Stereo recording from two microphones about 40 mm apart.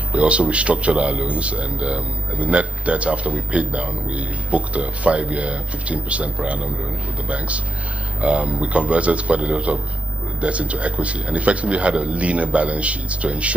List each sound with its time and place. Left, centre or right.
0.1 s a man's voice: right